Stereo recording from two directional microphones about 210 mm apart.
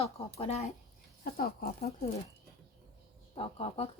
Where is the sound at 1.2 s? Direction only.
45° left (ahead or behind).